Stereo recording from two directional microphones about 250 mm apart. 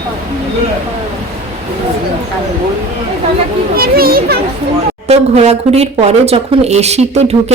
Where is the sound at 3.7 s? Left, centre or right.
Right.